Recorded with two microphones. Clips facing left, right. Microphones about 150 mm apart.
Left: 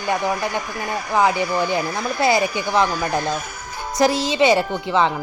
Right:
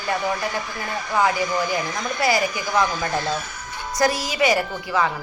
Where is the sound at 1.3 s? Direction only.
30° left (ahead or behind).